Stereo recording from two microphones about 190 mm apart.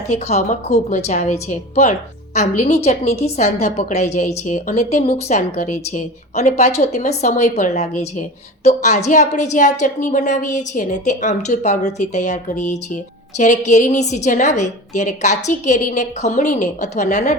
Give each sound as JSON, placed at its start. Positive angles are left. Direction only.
{"t": 0.1, "sound": "a woman's voice", "side_deg": 35}